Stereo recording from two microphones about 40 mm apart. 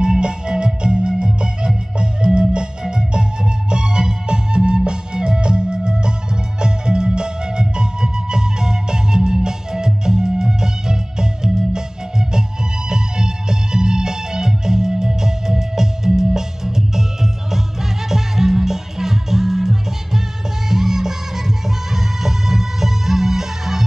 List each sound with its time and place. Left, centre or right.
0.0 s music: right